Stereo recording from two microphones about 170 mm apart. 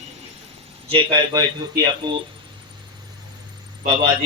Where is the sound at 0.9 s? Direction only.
30° right (ahead or behind).